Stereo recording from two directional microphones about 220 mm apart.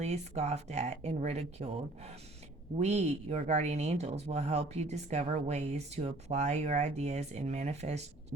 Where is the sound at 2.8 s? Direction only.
30° right (ahead or behind).